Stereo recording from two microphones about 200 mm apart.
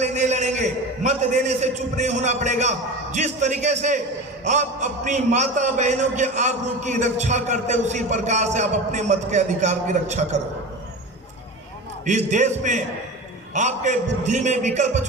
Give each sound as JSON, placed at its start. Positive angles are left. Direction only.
{"t": 0.0, "sound": "a man's voice", "side_deg": -35}
{"t": 12.0, "sound": "a man's voice", "side_deg": -35}